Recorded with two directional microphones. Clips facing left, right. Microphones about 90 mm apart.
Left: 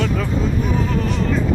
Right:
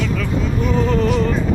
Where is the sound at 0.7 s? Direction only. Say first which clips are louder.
Right 4 dB; 5° left (ahead or behind).